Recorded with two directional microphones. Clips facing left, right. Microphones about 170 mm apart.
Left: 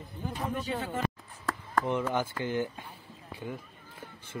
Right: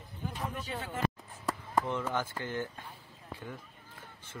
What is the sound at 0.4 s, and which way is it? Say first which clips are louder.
Speech: left 6 dB; 25° left (ahead or behind).